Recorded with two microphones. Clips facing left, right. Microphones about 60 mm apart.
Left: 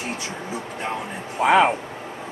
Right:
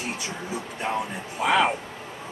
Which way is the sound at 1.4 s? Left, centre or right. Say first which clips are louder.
Left 5 dB; left.